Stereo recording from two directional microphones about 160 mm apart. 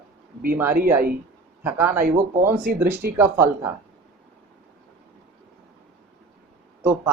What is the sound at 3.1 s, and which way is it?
Speech, 15° right (ahead or behind).